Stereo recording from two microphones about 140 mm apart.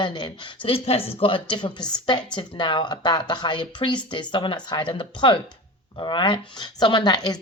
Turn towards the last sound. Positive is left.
turn(degrees=30)  # may be behind; listen again after turning